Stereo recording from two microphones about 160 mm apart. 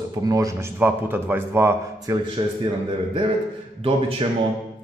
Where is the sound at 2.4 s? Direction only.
30° right (ahead or behind).